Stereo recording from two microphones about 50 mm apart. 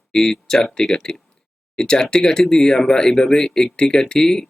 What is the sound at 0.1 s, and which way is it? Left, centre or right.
Speech, centre.